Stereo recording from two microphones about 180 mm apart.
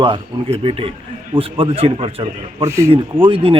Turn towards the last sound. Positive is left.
turn(degrees=-30)  # may be behind; listen again after turning